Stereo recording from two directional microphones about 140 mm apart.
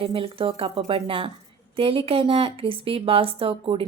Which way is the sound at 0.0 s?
40° right (ahead or behind).